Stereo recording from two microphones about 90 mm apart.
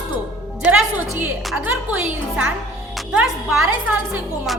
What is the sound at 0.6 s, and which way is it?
A woman's voice, 20° right (ahead or behind).